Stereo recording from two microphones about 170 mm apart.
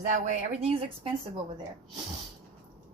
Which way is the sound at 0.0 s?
45° right (ahead or behind).